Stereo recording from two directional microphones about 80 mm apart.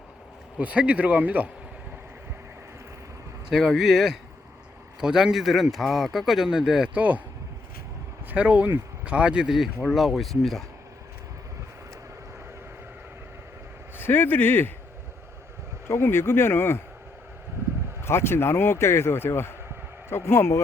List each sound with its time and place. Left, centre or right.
0.6 s speech: centre
3.5 s speech: centre
8.3 s speech: centre
14.0 s speech: left
15.9 s speech: left
18.0 s speech: left